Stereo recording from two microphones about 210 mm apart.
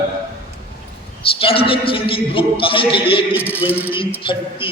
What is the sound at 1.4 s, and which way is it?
A man's voice, 25° left (ahead or behind).